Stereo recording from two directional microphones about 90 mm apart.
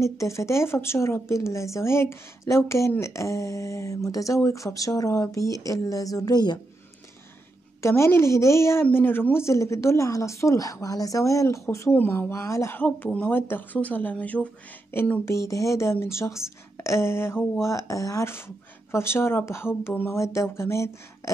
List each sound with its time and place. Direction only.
0.0 s a woman's voice: 35° left (ahead or behind); by 6.6 s 50° left (ahead or behind)
7.8 s a woman's voice: 30° left (ahead or behind)
11.9 s speech: 20° left (ahead or behind)
12.7 s a woman's voice: 20° left (ahead or behind)